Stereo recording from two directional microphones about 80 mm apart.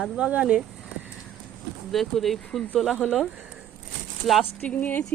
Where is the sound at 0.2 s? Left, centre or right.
Centre.